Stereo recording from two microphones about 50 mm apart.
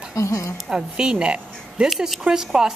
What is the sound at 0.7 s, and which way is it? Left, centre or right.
Speech, centre.